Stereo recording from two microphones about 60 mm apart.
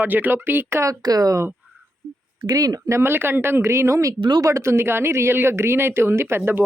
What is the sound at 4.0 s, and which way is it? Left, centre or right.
Speech, right.